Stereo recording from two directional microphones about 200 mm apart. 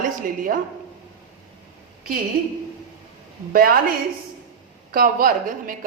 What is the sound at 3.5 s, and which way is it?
Speech, 45° right (ahead or behind).